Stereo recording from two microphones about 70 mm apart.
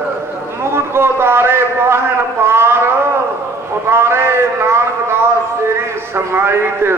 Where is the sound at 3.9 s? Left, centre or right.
Right.